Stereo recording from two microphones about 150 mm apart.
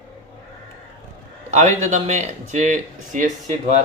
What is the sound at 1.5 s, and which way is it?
Speech, 50° right (ahead or behind).